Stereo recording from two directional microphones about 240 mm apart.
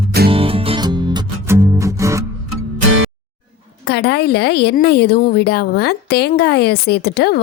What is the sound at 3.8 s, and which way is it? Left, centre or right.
Speech, left.